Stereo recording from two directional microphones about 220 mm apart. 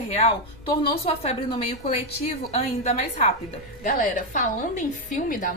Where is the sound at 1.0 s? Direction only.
25° left (ahead or behind).